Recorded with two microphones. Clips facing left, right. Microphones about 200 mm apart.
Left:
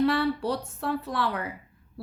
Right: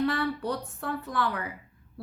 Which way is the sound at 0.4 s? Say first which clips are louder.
Left 3 dB; 75° left (ahead or behind).